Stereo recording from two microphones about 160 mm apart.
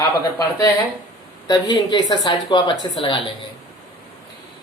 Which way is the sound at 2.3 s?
30° left (ahead or behind).